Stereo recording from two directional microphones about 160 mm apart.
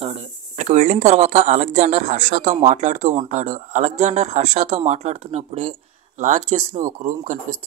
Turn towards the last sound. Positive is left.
turn(degrees=-50)  # may be behind; listen again after turning